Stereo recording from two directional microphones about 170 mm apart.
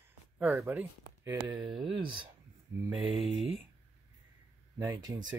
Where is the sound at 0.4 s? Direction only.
15° right (ahead or behind).